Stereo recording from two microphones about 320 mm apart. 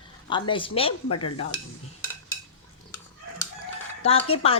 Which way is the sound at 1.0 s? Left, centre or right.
Left.